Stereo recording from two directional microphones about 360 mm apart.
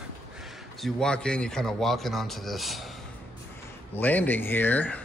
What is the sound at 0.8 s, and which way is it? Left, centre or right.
Speech, centre.